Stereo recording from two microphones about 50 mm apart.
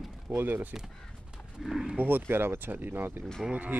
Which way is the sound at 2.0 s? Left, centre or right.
Right.